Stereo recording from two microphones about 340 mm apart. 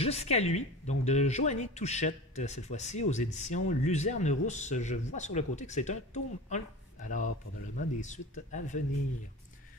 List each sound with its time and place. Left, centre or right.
0.0 s speech: centre